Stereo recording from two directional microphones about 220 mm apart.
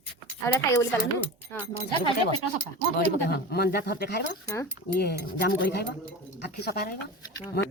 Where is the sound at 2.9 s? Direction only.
45° left (ahead or behind).